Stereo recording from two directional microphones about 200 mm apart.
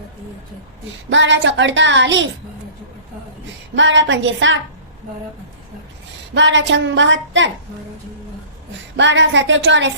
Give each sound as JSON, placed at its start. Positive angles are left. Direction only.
{"t": 1.1, "sound": "speech", "side_deg": -65}
{"t": 3.8, "sound": "a woman's voice", "side_deg": -65}
{"t": 6.3, "sound": "a woman's voice", "side_deg": -65}
{"t": 9.0, "sound": "speech", "side_deg": -65}